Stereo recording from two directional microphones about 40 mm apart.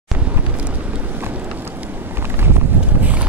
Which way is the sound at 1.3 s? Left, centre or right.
Right.